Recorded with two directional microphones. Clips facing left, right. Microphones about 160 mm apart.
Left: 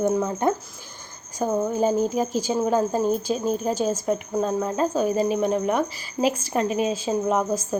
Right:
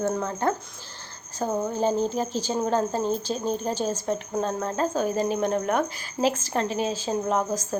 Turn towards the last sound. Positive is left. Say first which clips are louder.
# left 3 dB
turn(degrees=10)  # may be behind; listen again after turning